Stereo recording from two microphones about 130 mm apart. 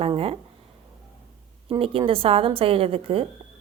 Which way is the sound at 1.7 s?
45° right (ahead or behind).